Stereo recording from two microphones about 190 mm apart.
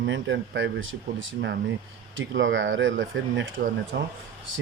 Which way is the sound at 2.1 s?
80° right.